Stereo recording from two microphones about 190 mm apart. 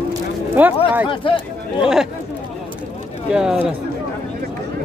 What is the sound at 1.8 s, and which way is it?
Speech, 5° right (ahead or behind).